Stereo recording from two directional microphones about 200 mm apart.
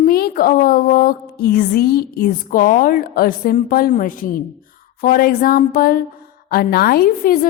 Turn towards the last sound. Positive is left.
turn(degrees=45)  # may be behind; listen again after turning